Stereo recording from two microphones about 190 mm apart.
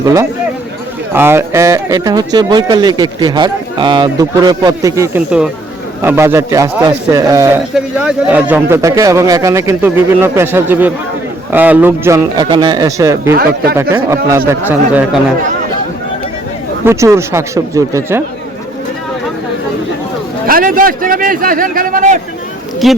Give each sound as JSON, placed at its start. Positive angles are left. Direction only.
{"t": 0.0, "sound": "a sound", "side_deg": -15}
{"t": 1.1, "sound": "speech", "side_deg": -10}
{"t": 13.3, "sound": "a man's voice", "side_deg": -55}
{"t": 13.7, "sound": "speech", "side_deg": -15}
{"t": 16.8, "sound": "speech", "side_deg": -15}
{"t": 20.5, "sound": "a man's voice", "side_deg": -45}
{"t": 22.8, "sound": "speech", "side_deg": 0}